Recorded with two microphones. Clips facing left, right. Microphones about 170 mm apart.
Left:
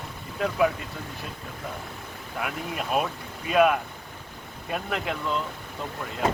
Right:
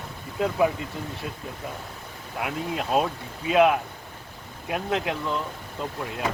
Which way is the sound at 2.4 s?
20° right (ahead or behind).